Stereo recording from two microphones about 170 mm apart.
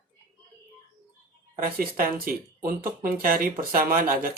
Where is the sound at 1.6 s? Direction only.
55° right (ahead or behind).